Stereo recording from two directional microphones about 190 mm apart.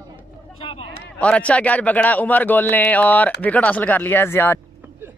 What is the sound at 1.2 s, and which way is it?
A man's voice, 5° left (ahead or behind).